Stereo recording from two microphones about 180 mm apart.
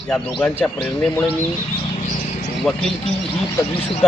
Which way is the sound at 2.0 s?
45° left (ahead or behind).